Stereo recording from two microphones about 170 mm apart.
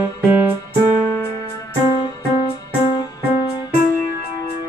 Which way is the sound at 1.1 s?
20° left (ahead or behind).